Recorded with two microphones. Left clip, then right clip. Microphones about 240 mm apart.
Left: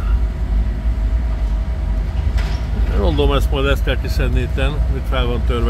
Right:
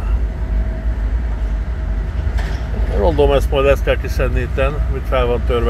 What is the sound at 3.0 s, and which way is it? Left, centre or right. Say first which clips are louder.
Speech: right 5 dB; centre.